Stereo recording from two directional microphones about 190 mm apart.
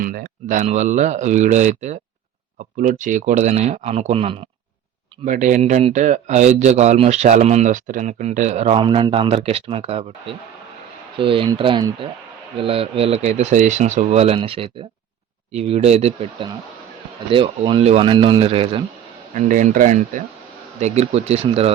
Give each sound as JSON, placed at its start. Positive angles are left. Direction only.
{"t": 0.0, "sound": "speech", "side_deg": -50}
{"t": 5.2, "sound": "speech", "side_deg": -45}
{"t": 19.3, "sound": "speech", "side_deg": -40}